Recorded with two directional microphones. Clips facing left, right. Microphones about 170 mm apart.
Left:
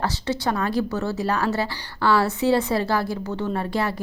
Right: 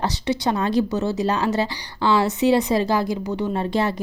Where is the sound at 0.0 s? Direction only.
15° right (ahead or behind).